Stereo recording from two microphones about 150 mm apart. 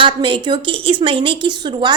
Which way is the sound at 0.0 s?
35° right (ahead or behind).